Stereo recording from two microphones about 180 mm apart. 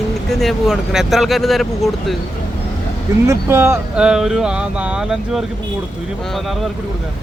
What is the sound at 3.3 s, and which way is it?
Speech, 15° right (ahead or behind).